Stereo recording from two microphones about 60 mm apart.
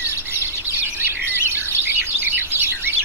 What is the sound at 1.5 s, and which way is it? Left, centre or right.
Bird, right.